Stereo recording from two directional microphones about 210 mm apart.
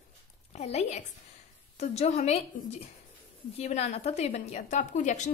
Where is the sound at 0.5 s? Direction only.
30° left (ahead or behind).